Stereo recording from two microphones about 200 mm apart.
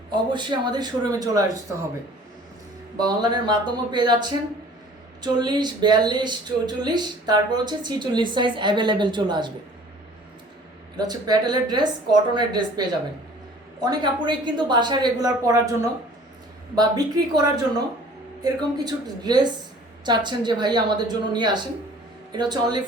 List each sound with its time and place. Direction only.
0.1 s speech: 25° right (ahead or behind)
3.1 s speech: 20° right (ahead or behind)
10.9 s speech: 20° right (ahead or behind)
13.8 s speech: 20° right (ahead or behind)